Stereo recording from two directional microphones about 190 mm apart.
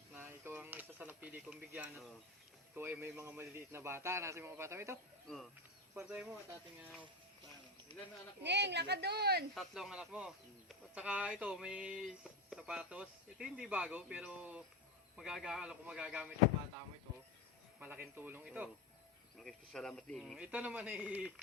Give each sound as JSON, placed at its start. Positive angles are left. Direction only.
{"t": 0.1, "sound": "a sound", "side_deg": -10}
{"t": 2.7, "sound": "a man's voice", "side_deg": -10}
{"t": 5.3, "sound": "speech", "side_deg": 5}
{"t": 5.9, "sound": "a man's voice", "side_deg": -5}
{"t": 8.4, "sound": "a woman's voice", "side_deg": -65}
{"t": 9.6, "sound": "speech", "side_deg": 0}
{"t": 17.7, "sound": "a man's voice", "side_deg": -10}
{"t": 19.4, "sound": "speech", "side_deg": 5}